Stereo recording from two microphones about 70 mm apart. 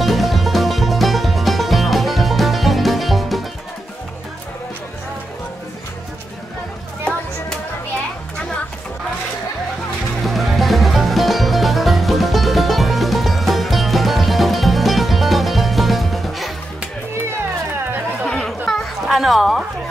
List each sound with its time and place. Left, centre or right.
0.0 s music: centre
10.2 s music: centre
18.2 s chatter: centre
19.0 s music: centre